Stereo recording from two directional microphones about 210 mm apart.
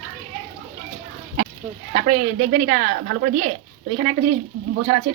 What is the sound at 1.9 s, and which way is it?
Speech, 40° right (ahead or behind).